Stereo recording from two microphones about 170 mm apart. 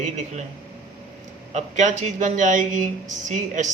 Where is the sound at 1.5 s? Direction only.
45° right (ahead or behind).